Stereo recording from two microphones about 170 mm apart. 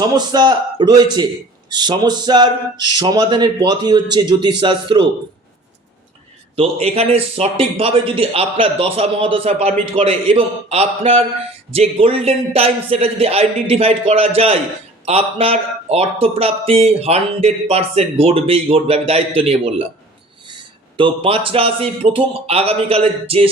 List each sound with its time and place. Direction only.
0.0 s speech: 25° right (ahead or behind)
6.6 s a man's voice: 35° right (ahead or behind)